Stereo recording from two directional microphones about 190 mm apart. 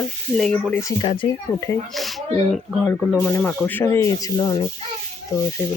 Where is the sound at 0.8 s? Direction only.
25° left (ahead or behind).